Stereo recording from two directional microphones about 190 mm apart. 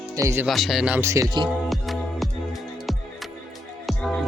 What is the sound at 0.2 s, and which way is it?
Speech, 15° right (ahead or behind).